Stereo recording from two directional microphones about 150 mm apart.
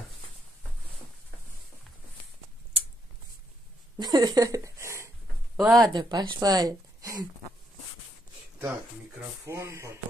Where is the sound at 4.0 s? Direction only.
25° right (ahead or behind).